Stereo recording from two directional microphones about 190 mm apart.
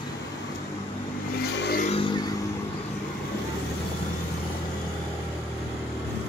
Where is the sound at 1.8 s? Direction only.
30° left (ahead or behind).